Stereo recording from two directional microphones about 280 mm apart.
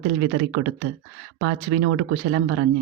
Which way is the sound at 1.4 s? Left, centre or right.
Right.